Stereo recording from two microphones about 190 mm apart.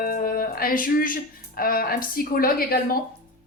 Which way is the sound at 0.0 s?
50° left (ahead or behind).